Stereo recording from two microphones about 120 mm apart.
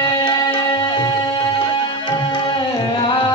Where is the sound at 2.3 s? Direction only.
40° left (ahead or behind).